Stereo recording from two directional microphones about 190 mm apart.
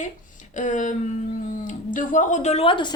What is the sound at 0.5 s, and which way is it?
Speech, 40° left (ahead or behind).